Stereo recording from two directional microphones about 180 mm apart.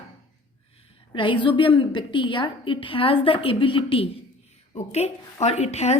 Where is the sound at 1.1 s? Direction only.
25° left (ahead or behind).